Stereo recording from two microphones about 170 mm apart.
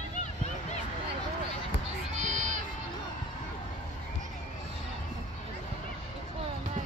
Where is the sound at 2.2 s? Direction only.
45° right (ahead or behind).